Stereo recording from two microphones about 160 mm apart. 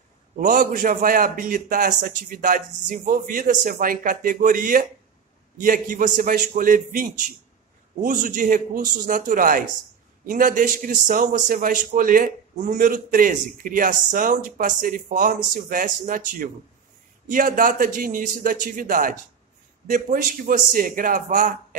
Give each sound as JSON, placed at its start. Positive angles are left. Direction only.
{"t": 0.4, "sound": "a man's voice", "side_deg": -55}